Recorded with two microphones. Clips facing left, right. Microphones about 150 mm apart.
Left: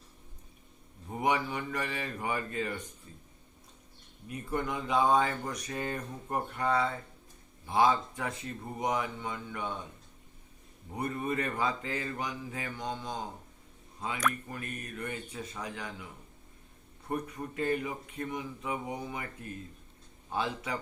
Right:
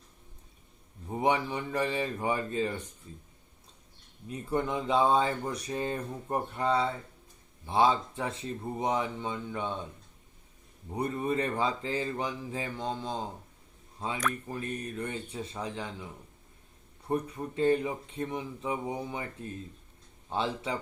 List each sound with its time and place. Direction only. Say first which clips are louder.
1.1 s speech: right 2 dB; 30° right (ahead or behind)
4.5 s speech: right 3 dB; 30° right (ahead or behind)
10.9 s speech: right 3 dB; 25° right (ahead or behind)
17.1 s speech: right 4 dB; 25° right (ahead or behind)